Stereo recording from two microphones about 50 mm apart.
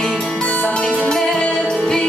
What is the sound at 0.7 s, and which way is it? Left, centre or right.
Music, centre.